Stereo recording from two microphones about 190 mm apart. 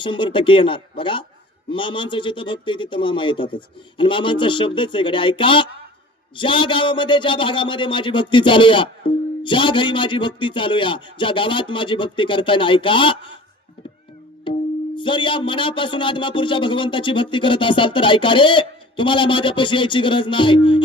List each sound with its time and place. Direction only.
0.0 s a man's voice: 25° left (ahead or behind)
14.5 s music: 25° left (ahead or behind)
14.9 s a man's voice: 25° left (ahead or behind)